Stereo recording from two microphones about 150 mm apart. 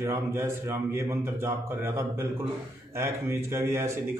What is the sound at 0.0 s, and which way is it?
A man's voice, 15° right (ahead or behind).